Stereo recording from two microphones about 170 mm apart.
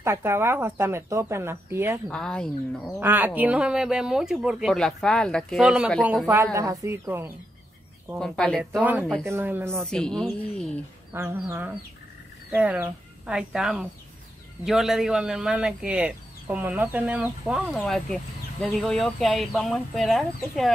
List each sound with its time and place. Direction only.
0.0 s speech: 15° right (ahead or behind)
2.0 s speech: 5° left (ahead or behind)
3.0 s speech: 10° right (ahead or behind)
6.2 s speech: 15° right (ahead or behind)
8.2 s speech: 5° left (ahead or behind)
9.2 s speech: 15° right (ahead or behind)
9.8 s speech: 5° left (ahead or behind)
11.1 s speech: 15° right (ahead or behind)